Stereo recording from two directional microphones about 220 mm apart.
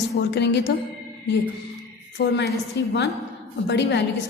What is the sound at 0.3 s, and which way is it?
Speech, 50° left (ahead or behind).